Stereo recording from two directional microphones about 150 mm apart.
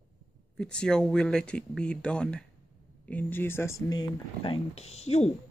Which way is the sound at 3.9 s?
30° left (ahead or behind).